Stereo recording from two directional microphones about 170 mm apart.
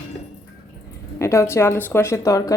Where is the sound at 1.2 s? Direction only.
15° left (ahead or behind).